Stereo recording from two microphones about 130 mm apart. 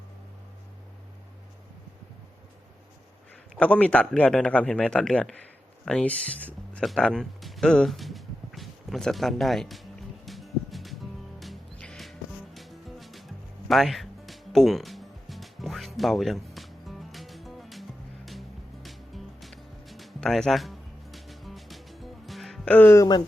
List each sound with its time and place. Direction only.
3.6 s speech: 10° left (ahead or behind)
10.2 s music: centre (ahead or behind)
22.7 s speech: 15° left (ahead or behind)